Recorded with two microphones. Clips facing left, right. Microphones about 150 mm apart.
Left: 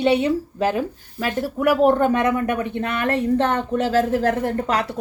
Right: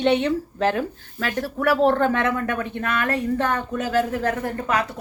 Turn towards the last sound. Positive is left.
turn(degrees=35)  # may be behind; listen again after turning